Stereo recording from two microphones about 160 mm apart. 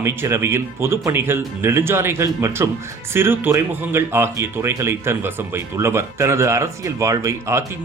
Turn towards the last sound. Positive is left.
turn(degrees=-20)  # may be behind; listen again after turning